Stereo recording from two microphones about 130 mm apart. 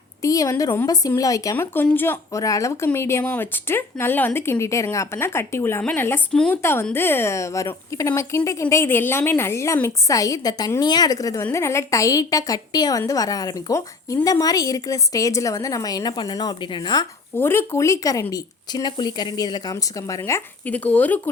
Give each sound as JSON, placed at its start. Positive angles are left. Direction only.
{"t": 0.2, "sound": "speech", "side_deg": 25}
{"t": 1.5, "sound": "speech", "side_deg": 15}
{"t": 6.6, "sound": "speech", "side_deg": 20}
{"t": 17.3, "sound": "speech", "side_deg": 15}